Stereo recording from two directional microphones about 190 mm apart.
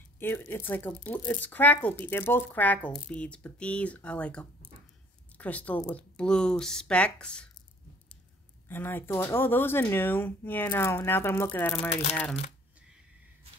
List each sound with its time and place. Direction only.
0.2 s speech: 10° left (ahead or behind)
8.6 s speech: 10° left (ahead or behind)
11.9 s speech: 35° left (ahead or behind)